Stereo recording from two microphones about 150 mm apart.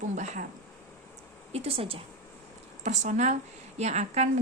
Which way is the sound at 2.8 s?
55° right (ahead or behind).